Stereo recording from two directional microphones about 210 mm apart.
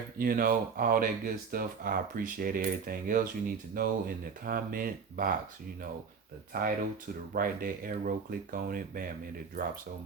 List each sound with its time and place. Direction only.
0.2 s speech: 45° right (ahead or behind)
6.5 s speech: 40° right (ahead or behind)